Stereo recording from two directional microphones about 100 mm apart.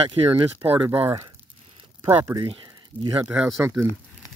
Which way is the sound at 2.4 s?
55° right (ahead or behind).